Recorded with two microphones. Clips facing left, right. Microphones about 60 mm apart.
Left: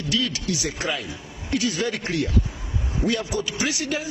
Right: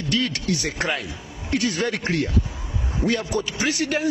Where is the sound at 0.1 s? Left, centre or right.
Right.